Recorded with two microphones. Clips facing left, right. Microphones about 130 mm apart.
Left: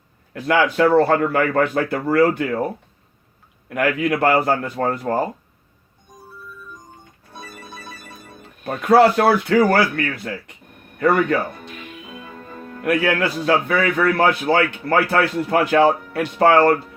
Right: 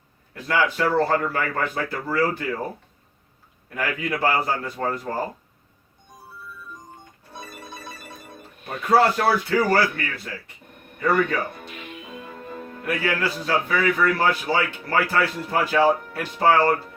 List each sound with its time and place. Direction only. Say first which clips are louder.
0.4 s a man's voice: left 6 dB; 65° left (ahead or behind)
3.8 s a man's voice: left 7 dB; 65° left (ahead or behind)
8.6 s a man's voice: left 5 dB; 65° left (ahead or behind)
11.0 s a man's voice: left 4 dB; 60° left (ahead or behind)
12.8 s a man's voice: left 6 dB; 65° left (ahead or behind)